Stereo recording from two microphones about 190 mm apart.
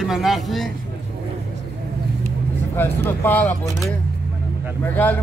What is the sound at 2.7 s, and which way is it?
Speech, 10° left (ahead or behind).